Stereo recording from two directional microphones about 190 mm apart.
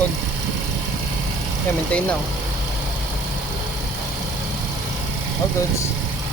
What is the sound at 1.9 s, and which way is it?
Speech, 5° left (ahead or behind).